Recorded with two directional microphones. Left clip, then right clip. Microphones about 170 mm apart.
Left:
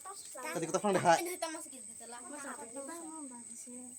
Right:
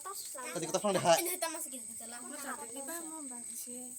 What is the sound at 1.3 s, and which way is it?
Speech, 50° right (ahead or behind).